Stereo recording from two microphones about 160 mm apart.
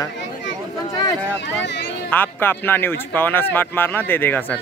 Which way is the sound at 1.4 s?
90° left.